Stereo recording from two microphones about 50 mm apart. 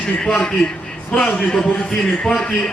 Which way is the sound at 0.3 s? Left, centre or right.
Left.